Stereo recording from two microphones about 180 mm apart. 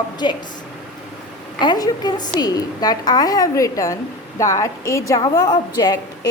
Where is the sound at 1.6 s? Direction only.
25° left (ahead or behind).